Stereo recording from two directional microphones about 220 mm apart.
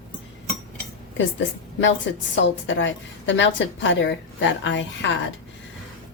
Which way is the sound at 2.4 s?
55° left (ahead or behind).